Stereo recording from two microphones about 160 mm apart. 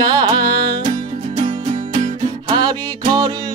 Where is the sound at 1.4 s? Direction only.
40° right (ahead or behind).